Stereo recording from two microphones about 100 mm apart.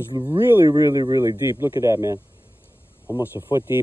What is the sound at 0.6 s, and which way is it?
Speech, 35° right (ahead or behind).